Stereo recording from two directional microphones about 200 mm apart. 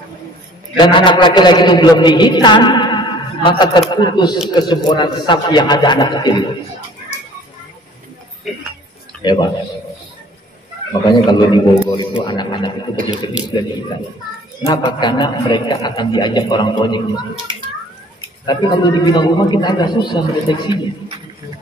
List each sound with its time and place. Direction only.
0.7 s a man's voice: 20° left (ahead or behind)
8.5 s speech: centre (ahead or behind)
9.2 s a man's voice: 20° left (ahead or behind)
11.2 s a man's voice: 20° left (ahead or behind)
14.7 s a man's voice: 20° left (ahead or behind)
18.4 s a man's voice: 20° left (ahead or behind)